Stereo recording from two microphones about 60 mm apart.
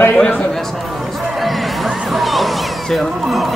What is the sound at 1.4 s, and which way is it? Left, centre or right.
Music, centre.